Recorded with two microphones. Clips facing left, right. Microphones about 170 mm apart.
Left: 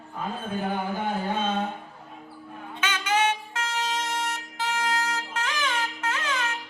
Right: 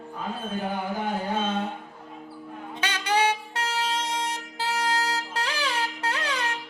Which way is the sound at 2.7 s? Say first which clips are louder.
Even; 35° right (ahead or behind).